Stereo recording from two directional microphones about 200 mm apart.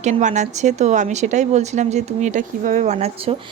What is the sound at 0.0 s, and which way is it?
A woman's voice, 35° right (ahead or behind).